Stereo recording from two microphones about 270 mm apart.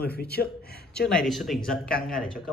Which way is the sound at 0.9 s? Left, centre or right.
Centre.